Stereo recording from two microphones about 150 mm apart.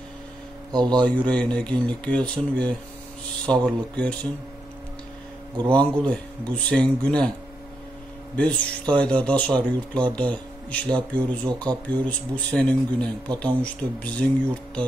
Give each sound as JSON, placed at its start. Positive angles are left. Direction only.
{"t": 0.7, "sound": "a man's voice", "side_deg": -30}
{"t": 1.0, "sound": "speech", "side_deg": 10}
{"t": 5.7, "sound": "speech", "side_deg": 10}
{"t": 8.4, "sound": "speech", "side_deg": 10}